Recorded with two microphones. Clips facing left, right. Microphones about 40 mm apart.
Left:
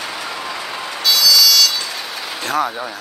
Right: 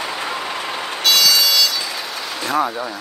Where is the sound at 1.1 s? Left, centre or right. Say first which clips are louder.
Left 1 dB; right.